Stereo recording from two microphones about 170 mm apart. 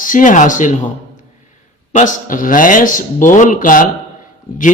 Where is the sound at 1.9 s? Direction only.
50° left (ahead or behind).